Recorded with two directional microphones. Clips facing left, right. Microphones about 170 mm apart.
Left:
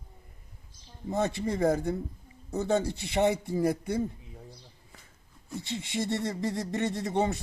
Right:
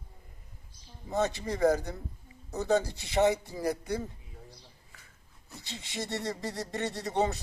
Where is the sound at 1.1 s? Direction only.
25° left (ahead or behind).